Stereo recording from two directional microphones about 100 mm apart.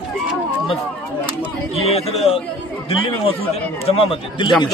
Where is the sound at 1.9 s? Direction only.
90° left.